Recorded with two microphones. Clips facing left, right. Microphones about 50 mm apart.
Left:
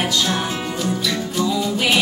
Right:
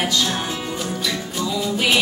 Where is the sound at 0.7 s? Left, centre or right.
Centre.